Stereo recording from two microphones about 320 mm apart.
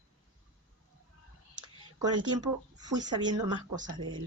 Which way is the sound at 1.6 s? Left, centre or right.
Centre.